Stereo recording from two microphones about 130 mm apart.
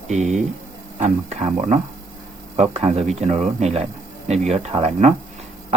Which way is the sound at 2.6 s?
55° right (ahead or behind).